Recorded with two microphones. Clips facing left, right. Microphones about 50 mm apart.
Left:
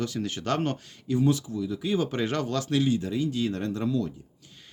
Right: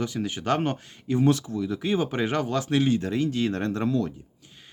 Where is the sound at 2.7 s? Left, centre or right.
Right.